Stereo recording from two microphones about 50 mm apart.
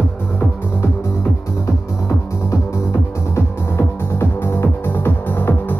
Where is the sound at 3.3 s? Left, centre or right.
Left.